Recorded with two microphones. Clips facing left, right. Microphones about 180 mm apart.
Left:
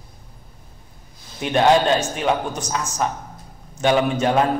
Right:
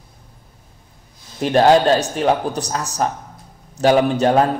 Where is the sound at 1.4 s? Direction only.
35° right (ahead or behind).